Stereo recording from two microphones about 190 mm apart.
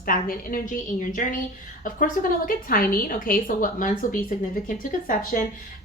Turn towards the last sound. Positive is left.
turn(degrees=45)  # may be behind; listen again after turning